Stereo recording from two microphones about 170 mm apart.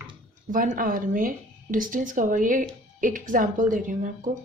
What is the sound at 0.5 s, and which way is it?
A woman's voice, 55° right (ahead or behind).